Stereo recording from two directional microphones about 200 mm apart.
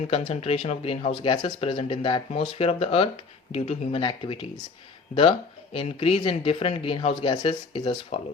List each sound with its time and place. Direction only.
0.1 s speech: 30° left (ahead or behind)
5.7 s speech: 30° left (ahead or behind)